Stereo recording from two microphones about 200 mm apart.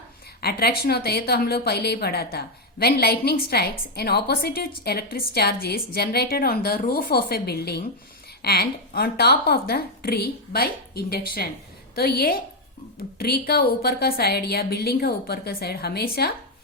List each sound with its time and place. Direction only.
0.4 s a woman's voice: 50° left (ahead or behind)